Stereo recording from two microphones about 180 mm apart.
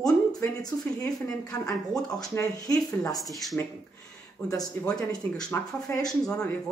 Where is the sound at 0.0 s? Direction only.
20° left (ahead or behind).